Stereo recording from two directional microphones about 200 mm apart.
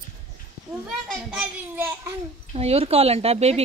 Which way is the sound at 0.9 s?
5° right (ahead or behind).